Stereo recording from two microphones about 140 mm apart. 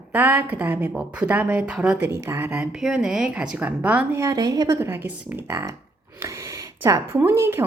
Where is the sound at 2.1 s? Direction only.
15° right (ahead or behind).